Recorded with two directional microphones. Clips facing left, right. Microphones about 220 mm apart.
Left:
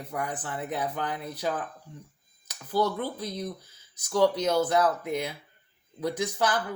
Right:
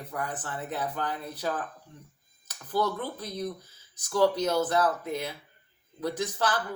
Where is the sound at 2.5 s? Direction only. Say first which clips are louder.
Left 2 dB; 10° left (ahead or behind).